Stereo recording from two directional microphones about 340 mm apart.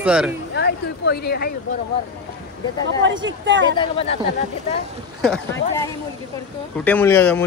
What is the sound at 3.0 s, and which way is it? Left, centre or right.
Speech, right.